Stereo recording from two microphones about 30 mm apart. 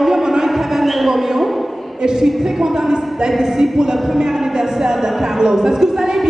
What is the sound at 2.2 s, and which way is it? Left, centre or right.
A man's voice, centre.